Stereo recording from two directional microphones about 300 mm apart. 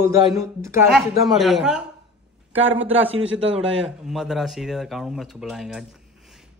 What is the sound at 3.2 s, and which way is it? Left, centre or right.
Speech, right.